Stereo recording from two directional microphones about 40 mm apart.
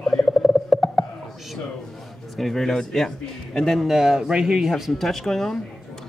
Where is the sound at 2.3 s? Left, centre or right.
Centre.